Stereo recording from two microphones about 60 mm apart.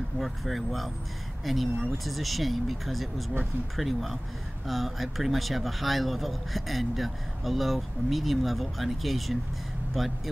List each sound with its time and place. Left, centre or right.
0.2 s speech: centre